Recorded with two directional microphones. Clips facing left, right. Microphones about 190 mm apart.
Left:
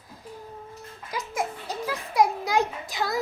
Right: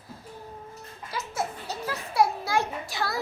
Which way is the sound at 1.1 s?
15° left (ahead or behind).